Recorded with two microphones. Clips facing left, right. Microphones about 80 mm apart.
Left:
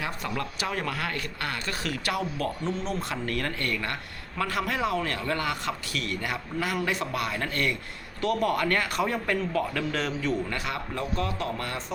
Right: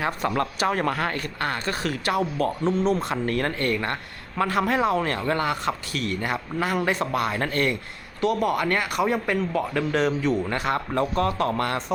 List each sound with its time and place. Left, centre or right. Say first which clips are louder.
0.0 s speech: right 7 dB; right
8.2 s speech: right 3 dB; centre
10.5 s speech: right 7 dB; right